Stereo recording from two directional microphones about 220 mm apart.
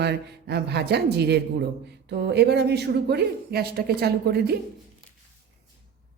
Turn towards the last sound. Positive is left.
turn(degrees=-45)  # may be behind; listen again after turning